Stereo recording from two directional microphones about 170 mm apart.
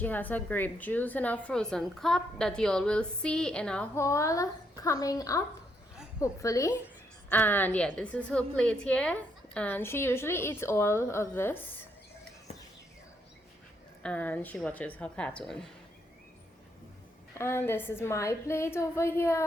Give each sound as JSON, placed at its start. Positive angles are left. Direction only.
{"t": 0.0, "sound": "a woman's voice", "side_deg": 10}
{"t": 4.0, "sound": "a woman's voice", "side_deg": 15}
{"t": 14.0, "sound": "a woman's voice", "side_deg": 10}
{"t": 17.3, "sound": "a woman's voice", "side_deg": 15}